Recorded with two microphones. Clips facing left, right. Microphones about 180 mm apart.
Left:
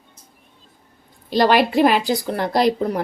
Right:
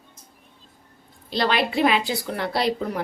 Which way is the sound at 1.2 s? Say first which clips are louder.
Left 7 dB; 45° left (ahead or behind).